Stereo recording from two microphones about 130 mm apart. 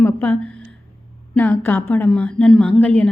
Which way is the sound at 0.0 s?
15° left (ahead or behind).